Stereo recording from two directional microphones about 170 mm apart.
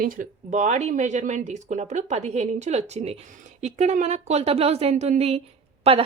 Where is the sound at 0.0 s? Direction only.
50° right (ahead or behind).